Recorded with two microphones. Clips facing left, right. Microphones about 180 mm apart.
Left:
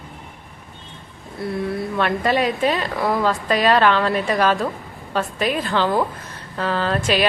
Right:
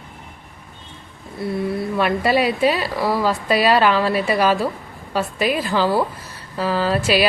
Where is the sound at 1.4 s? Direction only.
5° right (ahead or behind).